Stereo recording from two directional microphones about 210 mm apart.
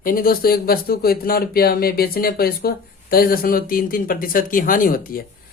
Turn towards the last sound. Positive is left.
turn(degrees=45)  # may be behind; listen again after turning